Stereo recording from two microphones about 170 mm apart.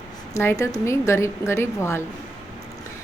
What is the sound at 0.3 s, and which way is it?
A woman's voice, 15° left (ahead or behind).